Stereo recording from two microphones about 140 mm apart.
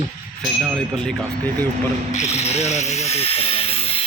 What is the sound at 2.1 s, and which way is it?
Speech, 50° left (ahead or behind).